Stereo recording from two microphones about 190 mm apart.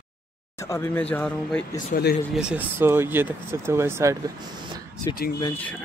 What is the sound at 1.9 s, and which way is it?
Speech, 55° left (ahead or behind).